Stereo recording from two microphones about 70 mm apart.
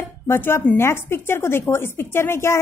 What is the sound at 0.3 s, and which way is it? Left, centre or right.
A woman's voice, left.